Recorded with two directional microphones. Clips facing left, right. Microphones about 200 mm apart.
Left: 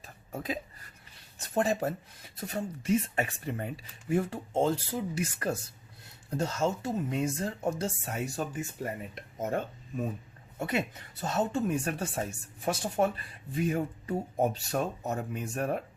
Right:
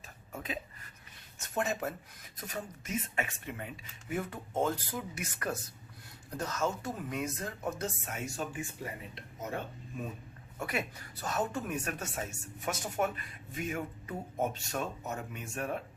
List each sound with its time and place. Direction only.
0.3 s a sound: 35° left (ahead or behind)
1.4 s a woman's voice: 35° left (ahead or behind)
10.6 s a woman's voice: 25° left (ahead or behind)